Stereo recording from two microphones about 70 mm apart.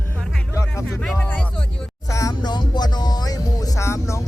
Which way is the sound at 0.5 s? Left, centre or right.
Left.